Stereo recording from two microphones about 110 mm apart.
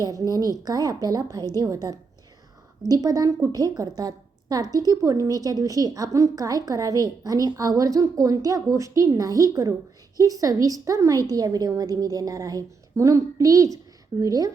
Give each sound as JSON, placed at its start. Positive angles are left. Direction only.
{"t": 0.0, "sound": "a woman's voice", "side_deg": -35}